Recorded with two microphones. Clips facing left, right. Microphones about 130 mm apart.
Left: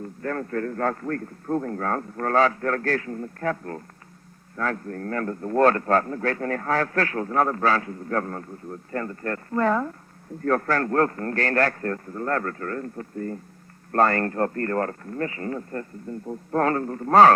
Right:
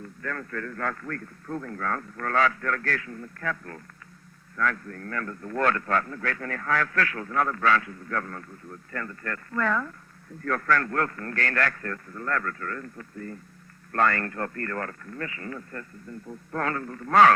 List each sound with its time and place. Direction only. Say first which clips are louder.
0.2 s a man's voice: left 7 dB; 35° left (ahead or behind)